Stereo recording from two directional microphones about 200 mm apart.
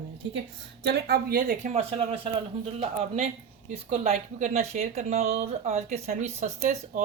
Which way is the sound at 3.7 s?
30° right (ahead or behind).